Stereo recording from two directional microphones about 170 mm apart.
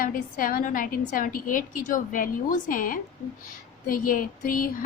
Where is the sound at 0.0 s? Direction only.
55° left (ahead or behind).